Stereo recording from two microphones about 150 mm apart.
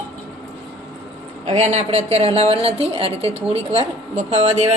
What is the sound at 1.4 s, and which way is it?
A woman's voice, 50° right (ahead or behind).